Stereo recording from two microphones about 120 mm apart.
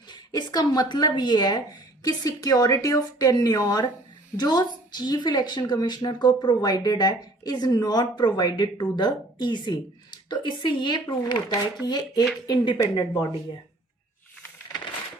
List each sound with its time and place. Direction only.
0.1 s speech: 35° left (ahead or behind)
12.8 s speech: 25° left (ahead or behind)